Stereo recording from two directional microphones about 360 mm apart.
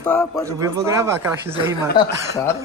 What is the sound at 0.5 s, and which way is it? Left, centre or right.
Speech, centre.